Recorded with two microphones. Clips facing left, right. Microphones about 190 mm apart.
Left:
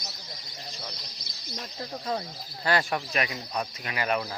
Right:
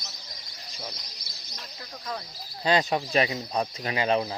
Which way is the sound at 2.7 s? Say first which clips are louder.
Right 3 dB; 20° right (ahead or behind).